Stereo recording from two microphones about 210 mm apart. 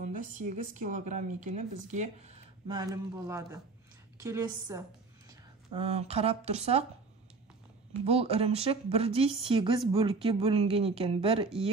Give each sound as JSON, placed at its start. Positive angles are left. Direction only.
{"t": 0.0, "sound": "speech", "side_deg": -40}
{"t": 2.7, "sound": "speech", "side_deg": -15}
{"t": 5.3, "sound": "speech", "side_deg": -25}
{"t": 8.0, "sound": "speech", "side_deg": -30}